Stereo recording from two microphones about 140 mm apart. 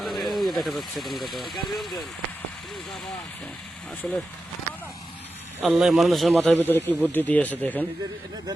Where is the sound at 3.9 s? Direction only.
15° left (ahead or behind).